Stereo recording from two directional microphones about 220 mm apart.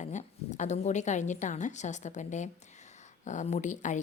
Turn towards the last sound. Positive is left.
turn(degrees=35)  # may be behind; listen again after turning